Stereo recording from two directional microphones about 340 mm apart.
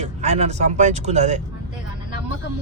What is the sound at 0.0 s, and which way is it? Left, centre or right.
Speech, centre.